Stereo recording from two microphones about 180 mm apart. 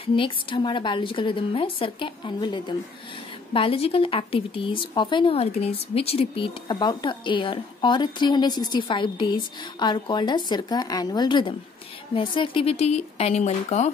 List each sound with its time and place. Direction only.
0.0 s speech: 30° left (ahead or behind)